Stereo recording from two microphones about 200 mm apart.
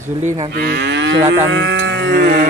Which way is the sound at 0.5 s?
55° right (ahead or behind).